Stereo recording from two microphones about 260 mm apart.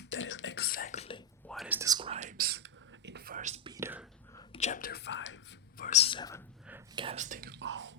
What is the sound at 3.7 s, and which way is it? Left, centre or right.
Whispering, centre.